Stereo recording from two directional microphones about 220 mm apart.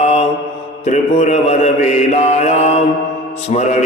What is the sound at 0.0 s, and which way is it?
Mantra, 30° left (ahead or behind).